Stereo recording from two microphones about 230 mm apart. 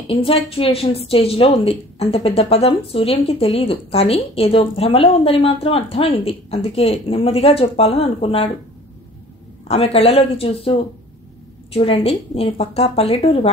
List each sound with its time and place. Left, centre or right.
0.1 s speech: left
9.7 s speech: left